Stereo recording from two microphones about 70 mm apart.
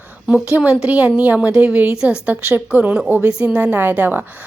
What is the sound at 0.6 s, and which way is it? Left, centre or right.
A woman's voice, centre.